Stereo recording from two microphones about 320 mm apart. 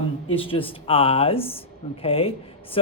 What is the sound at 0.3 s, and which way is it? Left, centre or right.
Speech, centre.